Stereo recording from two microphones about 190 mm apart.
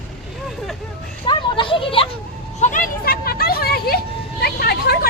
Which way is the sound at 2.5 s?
40° left (ahead or behind).